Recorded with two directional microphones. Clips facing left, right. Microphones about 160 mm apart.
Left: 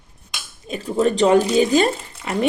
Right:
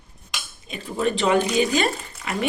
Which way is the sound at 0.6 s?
40° left (ahead or behind).